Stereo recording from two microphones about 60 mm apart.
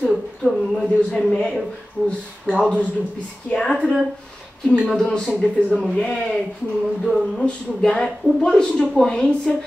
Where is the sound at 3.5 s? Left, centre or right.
Centre.